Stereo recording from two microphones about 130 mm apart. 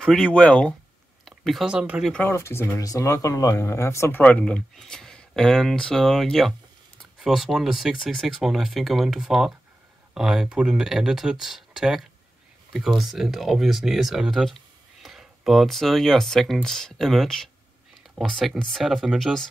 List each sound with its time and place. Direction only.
0.0 s speech: 5° left (ahead or behind)
2.1 s speech: 20° left (ahead or behind)
4.2 s speech: 10° left (ahead or behind)